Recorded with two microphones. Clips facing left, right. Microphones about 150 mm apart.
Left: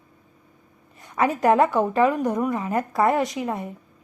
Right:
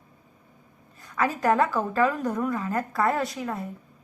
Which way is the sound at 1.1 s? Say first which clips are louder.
Left 4 dB; 25° left (ahead or behind).